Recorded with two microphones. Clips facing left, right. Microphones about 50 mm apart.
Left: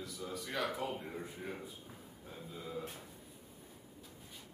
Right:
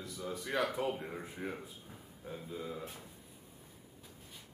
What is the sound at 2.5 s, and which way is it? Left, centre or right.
Speech, centre.